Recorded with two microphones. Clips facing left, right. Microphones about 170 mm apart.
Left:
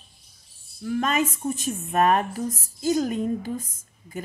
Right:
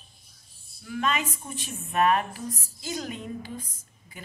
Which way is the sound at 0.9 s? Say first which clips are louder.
Left 5 dB; 45° left (ahead or behind).